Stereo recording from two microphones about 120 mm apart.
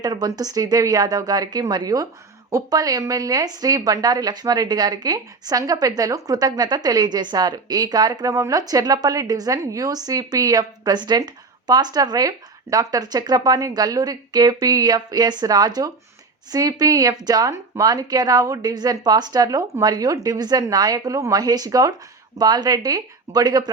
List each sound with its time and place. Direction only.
0.0 s a woman's voice: 35° right (ahead or behind)